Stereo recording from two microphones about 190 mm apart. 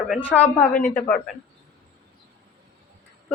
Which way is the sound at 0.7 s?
45° left (ahead or behind).